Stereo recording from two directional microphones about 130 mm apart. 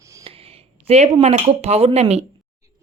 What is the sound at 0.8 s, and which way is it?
Speech, 55° right (ahead or behind).